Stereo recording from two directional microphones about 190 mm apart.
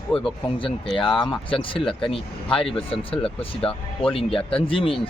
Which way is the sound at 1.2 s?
25° left (ahead or behind).